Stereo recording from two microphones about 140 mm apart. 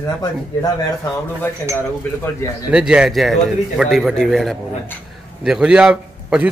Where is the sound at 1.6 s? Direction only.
15° left (ahead or behind).